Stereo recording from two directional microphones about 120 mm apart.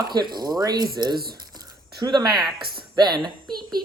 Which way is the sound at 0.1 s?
35° right (ahead or behind).